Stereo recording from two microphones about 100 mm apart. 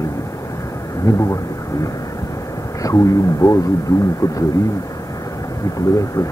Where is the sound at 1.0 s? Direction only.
30° left (ahead or behind).